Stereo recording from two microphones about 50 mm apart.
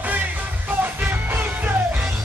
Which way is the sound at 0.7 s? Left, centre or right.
Right.